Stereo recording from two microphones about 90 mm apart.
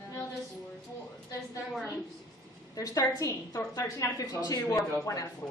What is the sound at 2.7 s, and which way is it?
A woman's voice, 40° left (ahead or behind).